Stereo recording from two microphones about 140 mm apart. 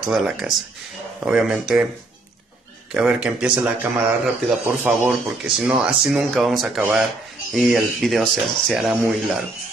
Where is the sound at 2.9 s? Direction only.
5° right (ahead or behind).